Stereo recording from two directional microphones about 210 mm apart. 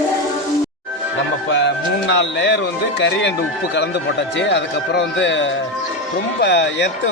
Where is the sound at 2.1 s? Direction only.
55° left (ahead or behind).